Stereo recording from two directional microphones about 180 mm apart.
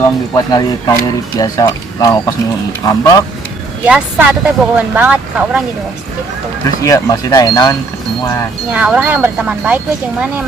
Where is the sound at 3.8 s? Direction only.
5° right (ahead or behind).